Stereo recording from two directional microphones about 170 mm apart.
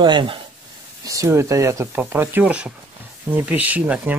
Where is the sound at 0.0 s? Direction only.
30° right (ahead or behind).